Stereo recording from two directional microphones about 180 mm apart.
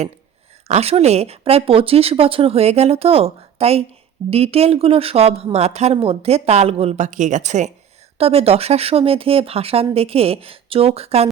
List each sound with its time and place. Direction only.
0.7 s speech: 35° right (ahead or behind)